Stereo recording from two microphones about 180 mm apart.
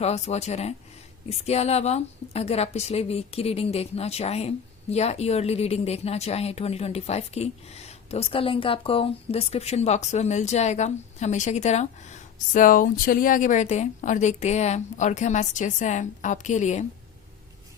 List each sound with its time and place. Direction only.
0.0 s speech: 35° left (ahead or behind)